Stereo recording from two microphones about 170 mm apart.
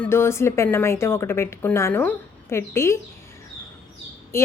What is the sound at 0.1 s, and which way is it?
A woman's voice, 15° left (ahead or behind).